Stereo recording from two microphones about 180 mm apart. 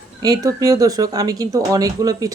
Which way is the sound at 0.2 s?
20° right (ahead or behind).